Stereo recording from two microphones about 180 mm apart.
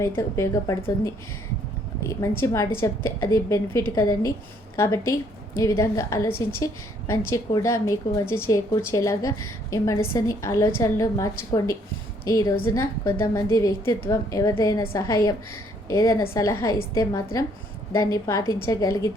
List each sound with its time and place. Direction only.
0.0 s a woman's voice: 15° left (ahead or behind)
2.0 s a woman's voice: 15° left (ahead or behind)